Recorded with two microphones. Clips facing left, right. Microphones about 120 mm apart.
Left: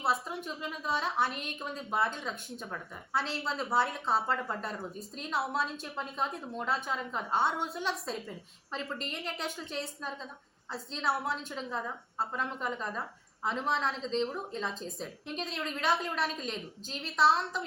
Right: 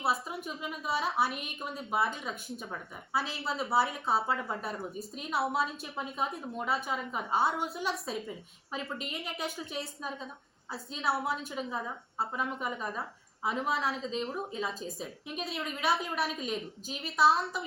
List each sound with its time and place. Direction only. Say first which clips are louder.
0.0 s a woman's voice: even; 5° right (ahead or behind)